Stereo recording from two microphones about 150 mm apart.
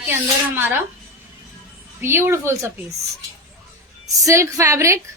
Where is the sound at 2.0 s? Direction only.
15° right (ahead or behind).